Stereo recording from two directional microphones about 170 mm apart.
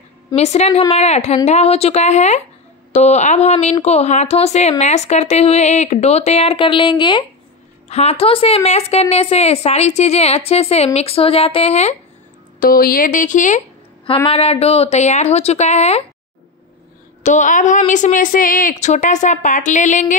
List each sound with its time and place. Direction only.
0.4 s a woman's voice: 40° left (ahead or behind)
7.9 s a woman's voice: 40° left (ahead or behind)
12.5 s a woman's voice: 60° left (ahead or behind)
14.0 s a woman's voice: 30° left (ahead or behind)
17.2 s a woman's voice: 45° left (ahead or behind)